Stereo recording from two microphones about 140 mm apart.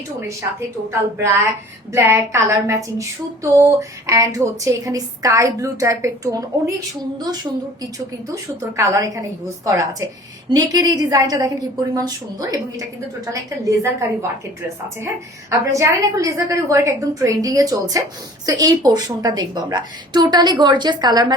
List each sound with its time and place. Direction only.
0.9 s a woman's voice: 20° right (ahead or behind)
8.7 s a woman's voice: 20° right (ahead or behind)
10.5 s a woman's voice: 25° right (ahead or behind)